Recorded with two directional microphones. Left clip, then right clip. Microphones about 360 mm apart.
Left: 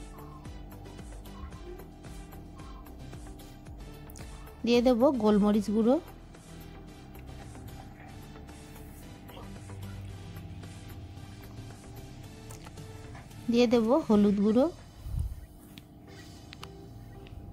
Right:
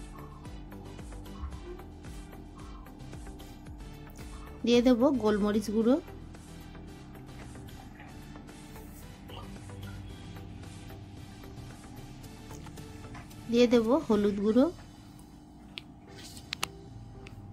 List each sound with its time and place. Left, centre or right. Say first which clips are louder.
4.6 s speech: left 1 dB; left
13.5 s speech: even; left